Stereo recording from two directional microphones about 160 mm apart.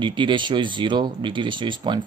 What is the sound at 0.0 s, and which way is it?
Speech, 30° right (ahead or behind).